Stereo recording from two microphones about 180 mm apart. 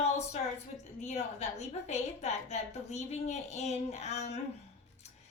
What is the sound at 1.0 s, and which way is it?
A woman's voice, 40° left (ahead or behind).